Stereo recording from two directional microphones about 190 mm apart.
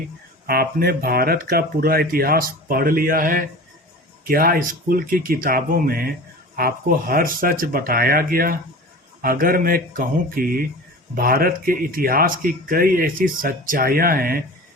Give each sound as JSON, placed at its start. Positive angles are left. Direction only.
{"t": 0.4, "sound": "speech", "side_deg": -50}